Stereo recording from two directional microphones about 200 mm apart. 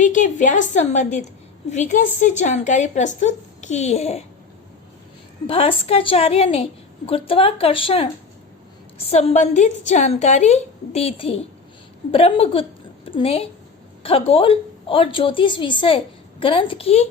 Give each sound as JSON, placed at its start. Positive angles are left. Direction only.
{"t": 0.0, "sound": "a woman's voice", "side_deg": 40}
{"t": 5.5, "sound": "a woman's voice", "side_deg": 30}